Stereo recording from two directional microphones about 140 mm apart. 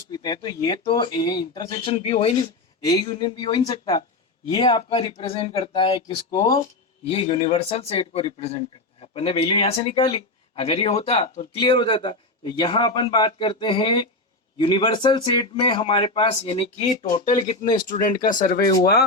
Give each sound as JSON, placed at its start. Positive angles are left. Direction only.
{"t": 0.1, "sound": "speech", "side_deg": 30}
{"t": 2.4, "sound": "speech", "side_deg": 30}
{"t": 4.5, "sound": "speech", "side_deg": 40}
{"t": 7.1, "sound": "speech", "side_deg": 40}
{"t": 17.8, "sound": "speech", "side_deg": 70}